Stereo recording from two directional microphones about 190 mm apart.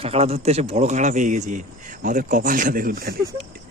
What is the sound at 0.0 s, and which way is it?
Speech, 35° right (ahead or behind).